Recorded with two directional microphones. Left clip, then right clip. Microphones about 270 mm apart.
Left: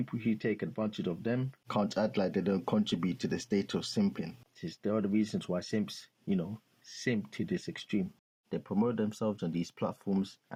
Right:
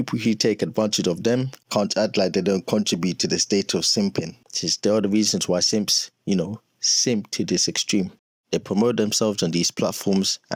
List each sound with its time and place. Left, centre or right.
0.0 s speech: right
1.7 s speech: right